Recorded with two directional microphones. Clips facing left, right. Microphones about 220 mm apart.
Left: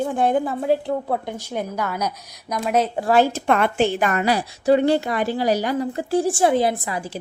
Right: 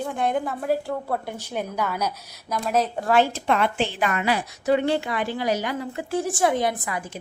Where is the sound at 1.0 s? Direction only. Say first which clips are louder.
Left 3 dB; 15° left (ahead or behind).